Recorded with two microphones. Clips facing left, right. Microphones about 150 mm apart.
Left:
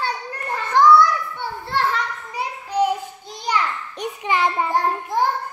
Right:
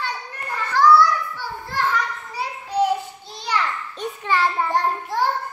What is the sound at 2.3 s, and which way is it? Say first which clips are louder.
Child singing: left 1 dB; 10° left (ahead or behind).